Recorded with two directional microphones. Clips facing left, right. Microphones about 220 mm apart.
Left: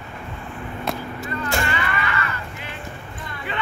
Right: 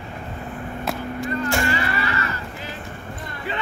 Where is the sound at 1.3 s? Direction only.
40° right (ahead or behind).